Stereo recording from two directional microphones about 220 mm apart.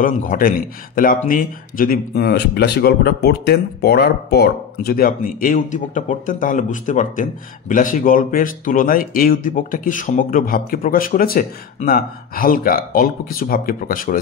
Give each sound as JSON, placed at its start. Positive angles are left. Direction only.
{"t": 0.0, "sound": "speech", "side_deg": 35}